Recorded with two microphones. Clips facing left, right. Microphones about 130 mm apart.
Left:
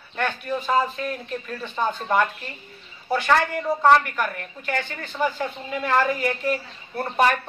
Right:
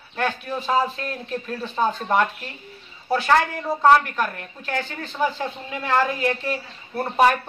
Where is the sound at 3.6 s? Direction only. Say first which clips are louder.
Even; 5° right (ahead or behind).